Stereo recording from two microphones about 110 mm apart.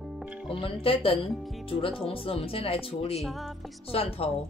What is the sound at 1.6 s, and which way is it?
Speech, 55° left (ahead or behind).